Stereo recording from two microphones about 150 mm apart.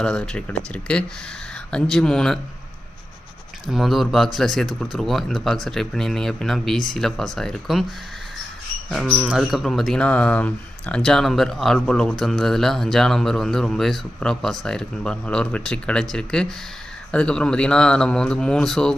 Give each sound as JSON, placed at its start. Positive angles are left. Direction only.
{"t": 0.0, "sound": "speech", "side_deg": 5}
{"t": 3.7, "sound": "speech", "side_deg": 0}
{"t": 8.9, "sound": "speech", "side_deg": 5}